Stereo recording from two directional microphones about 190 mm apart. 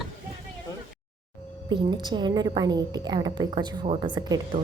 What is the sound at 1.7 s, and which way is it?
A woman's voice, 25° right (ahead or behind).